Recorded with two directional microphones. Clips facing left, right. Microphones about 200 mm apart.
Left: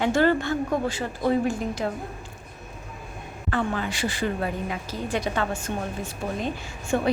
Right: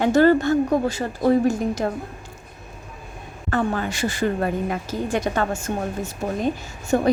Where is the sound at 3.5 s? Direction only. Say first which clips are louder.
Right 4 dB; 45° right (ahead or behind).